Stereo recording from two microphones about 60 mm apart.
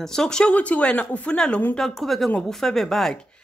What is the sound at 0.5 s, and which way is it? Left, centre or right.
Speech, left.